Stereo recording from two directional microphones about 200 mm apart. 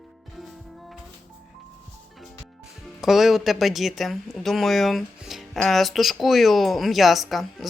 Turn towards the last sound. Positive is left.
turn(degrees=0)  # may be behind; listen again after turning